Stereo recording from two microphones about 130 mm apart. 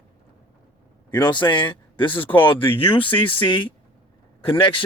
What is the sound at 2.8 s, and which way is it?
Speech, 45° left (ahead or behind).